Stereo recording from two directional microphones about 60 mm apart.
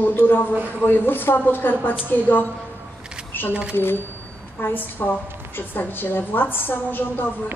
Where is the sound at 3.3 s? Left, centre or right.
Left.